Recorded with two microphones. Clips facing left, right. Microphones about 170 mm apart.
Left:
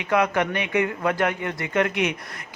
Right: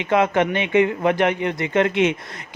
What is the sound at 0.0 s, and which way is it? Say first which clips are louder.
Speech: right 4 dB; 25° right (ahead or behind).